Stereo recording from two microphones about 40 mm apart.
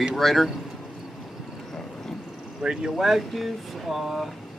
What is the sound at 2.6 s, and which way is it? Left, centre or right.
Speech, centre.